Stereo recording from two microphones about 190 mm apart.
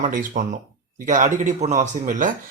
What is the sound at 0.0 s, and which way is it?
Speech, 45° right (ahead or behind).